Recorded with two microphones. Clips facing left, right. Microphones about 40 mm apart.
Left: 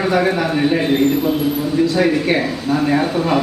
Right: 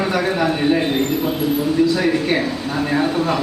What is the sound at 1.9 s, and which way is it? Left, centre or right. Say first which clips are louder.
Speech: left 2 dB; left.